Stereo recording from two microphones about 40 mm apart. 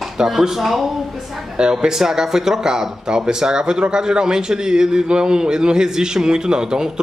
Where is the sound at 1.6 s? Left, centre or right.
Right.